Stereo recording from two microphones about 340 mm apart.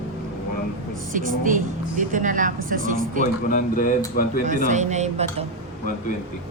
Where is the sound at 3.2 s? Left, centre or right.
Left.